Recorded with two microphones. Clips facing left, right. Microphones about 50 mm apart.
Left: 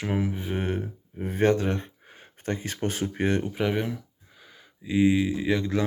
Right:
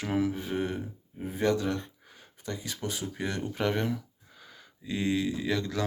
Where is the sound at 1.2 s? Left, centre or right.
Left.